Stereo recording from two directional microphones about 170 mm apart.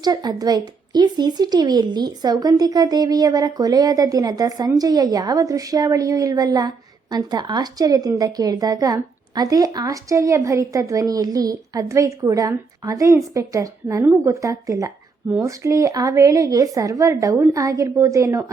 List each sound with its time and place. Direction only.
0.0 s a woman's voice: 25° right (ahead or behind)